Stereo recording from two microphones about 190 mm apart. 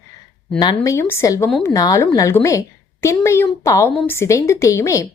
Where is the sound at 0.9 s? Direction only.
15° left (ahead or behind).